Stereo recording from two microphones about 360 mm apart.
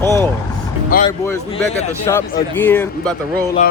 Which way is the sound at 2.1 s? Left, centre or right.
Centre.